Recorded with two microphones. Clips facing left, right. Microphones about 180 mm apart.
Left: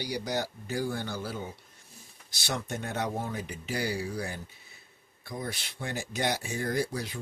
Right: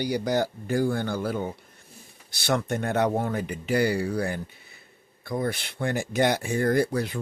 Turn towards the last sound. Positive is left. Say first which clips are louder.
# right 7 dB
turn(degrees=-60)  # may be behind; listen again after turning